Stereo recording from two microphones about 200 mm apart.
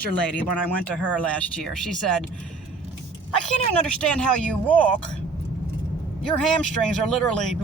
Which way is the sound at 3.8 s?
5° left (ahead or behind).